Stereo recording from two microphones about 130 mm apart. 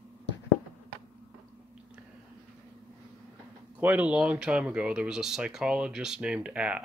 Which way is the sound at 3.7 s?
10° right (ahead or behind).